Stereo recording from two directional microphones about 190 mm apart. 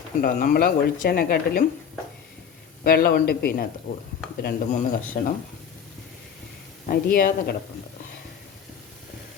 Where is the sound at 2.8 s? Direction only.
50° left (ahead or behind).